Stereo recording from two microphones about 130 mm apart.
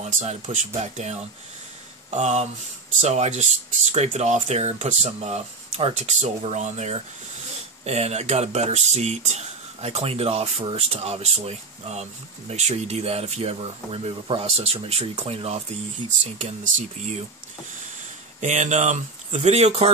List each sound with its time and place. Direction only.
0.0 s speech: 60° right (ahead or behind)
16.3 s speech: 75° right (ahead or behind)
18.4 s speech: 65° right (ahead or behind)